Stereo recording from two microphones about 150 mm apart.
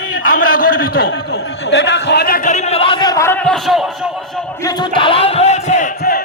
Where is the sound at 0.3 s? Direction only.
70° left (ahead or behind).